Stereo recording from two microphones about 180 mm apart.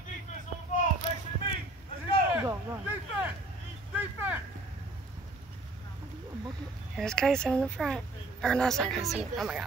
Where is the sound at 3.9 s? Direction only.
10° right (ahead or behind).